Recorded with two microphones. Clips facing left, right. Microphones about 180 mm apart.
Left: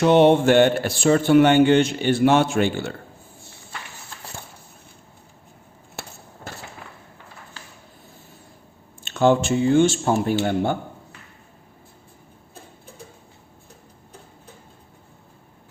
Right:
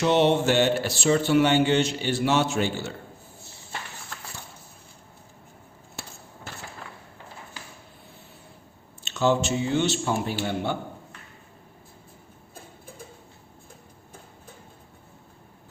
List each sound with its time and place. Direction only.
0.0 s speech: 55° left (ahead or behind)
9.0 s speech: 55° left (ahead or behind)